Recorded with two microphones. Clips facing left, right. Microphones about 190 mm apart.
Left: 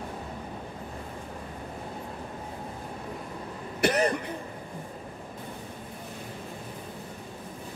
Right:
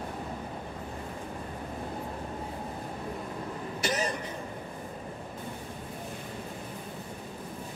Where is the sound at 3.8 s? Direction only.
60° left (ahead or behind).